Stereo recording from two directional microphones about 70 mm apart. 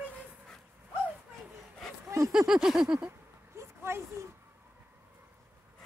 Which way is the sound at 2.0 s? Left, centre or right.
Right.